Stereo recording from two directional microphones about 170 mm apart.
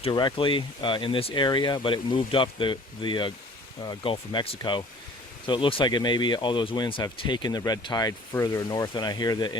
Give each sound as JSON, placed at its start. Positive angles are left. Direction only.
{"t": 0.0, "sound": "speech", "side_deg": 25}